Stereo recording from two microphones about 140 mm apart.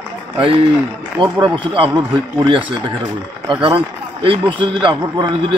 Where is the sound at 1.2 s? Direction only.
35° right (ahead or behind).